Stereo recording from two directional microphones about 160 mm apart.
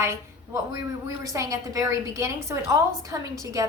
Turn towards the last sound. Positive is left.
turn(degrees=-20)  # may be behind; listen again after turning